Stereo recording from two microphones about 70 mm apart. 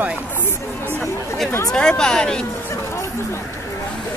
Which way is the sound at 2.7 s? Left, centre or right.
Left.